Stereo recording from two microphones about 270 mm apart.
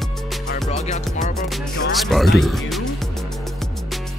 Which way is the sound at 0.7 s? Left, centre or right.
Left.